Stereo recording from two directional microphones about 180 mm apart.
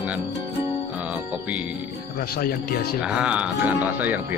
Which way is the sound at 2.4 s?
55° left (ahead or behind).